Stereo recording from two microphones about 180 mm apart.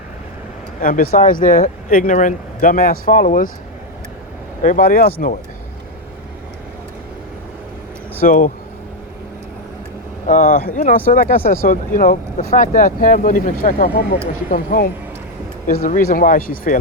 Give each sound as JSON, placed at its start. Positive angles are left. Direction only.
{"t": 0.8, "sound": "speech", "side_deg": 50}
{"t": 4.6, "sound": "speech", "side_deg": 50}
{"t": 8.2, "sound": "speech", "side_deg": 50}
{"t": 10.2, "sound": "speech", "side_deg": 45}